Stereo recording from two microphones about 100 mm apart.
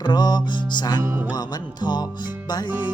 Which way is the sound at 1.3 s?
45° left (ahead or behind).